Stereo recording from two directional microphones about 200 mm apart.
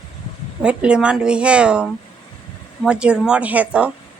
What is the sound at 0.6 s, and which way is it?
A woman's voice, 5° right (ahead or behind).